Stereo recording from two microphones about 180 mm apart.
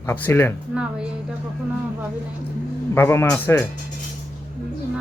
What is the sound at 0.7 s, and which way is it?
Speech, 5° right (ahead or behind).